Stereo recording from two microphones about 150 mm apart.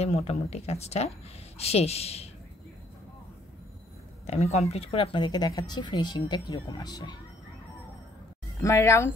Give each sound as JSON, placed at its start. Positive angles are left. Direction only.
{"t": 0.0, "sound": "speech", "side_deg": 45}
{"t": 4.3, "sound": "speech", "side_deg": 45}
{"t": 8.5, "sound": "speech", "side_deg": 20}